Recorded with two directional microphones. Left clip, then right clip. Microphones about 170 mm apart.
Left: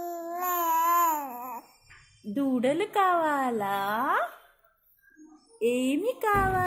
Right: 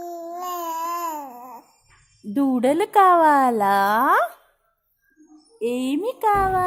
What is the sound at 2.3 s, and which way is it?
Speech, 50° right (ahead or behind).